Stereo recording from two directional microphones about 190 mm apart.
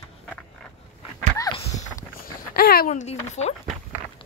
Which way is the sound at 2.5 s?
50° left (ahead or behind).